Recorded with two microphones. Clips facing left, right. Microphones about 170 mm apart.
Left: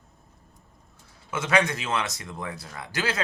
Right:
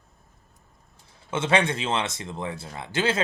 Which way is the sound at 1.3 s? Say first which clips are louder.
Right 1 dB; 25° right (ahead or behind).